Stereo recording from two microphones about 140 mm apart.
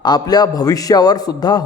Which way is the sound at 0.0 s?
30° left (ahead or behind).